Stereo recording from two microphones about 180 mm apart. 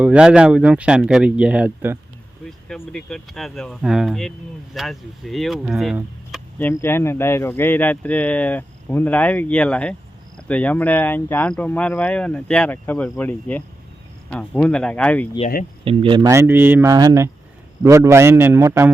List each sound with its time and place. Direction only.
0.0 s speech: 5° right (ahead or behind)
2.5 s speech: 5° left (ahead or behind)
6.6 s speech: 10° left (ahead or behind)
15.8 s a man's voice: 30° right (ahead or behind); by 18.9 s 15° right (ahead or behind)